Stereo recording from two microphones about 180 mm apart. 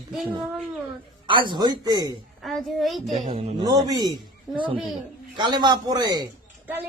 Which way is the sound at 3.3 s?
30° right (ahead or behind).